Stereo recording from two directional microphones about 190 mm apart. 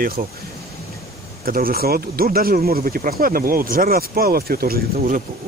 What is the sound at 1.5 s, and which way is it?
Speech, 50° right (ahead or behind).